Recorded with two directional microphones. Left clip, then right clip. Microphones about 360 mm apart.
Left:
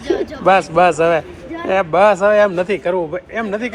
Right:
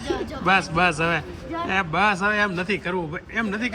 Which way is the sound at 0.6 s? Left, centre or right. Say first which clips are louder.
Left 9 dB; centre.